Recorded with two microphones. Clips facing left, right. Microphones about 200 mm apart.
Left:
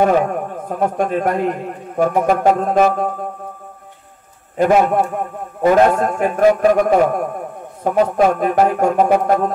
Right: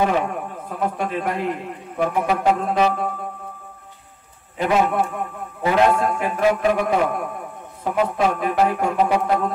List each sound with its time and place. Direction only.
0.0 s a man's voice: 45° left (ahead or behind)
4.6 s a man's voice: 45° left (ahead or behind)